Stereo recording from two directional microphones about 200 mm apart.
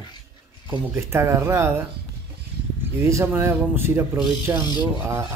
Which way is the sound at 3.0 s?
10° right (ahead or behind).